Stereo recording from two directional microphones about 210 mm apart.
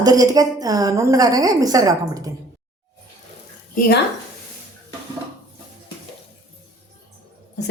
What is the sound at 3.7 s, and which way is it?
Speech, 45° left (ahead or behind).